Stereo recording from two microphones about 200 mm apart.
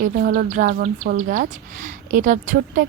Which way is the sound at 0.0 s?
50° right (ahead or behind).